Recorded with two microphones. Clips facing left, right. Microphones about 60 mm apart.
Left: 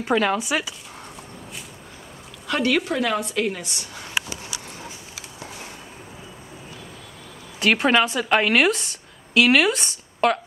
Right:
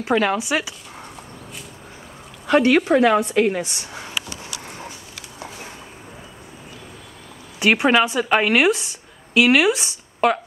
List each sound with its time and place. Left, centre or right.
0.0 s speech: centre
2.4 s a woman's voice: right
7.5 s a woman's voice: centre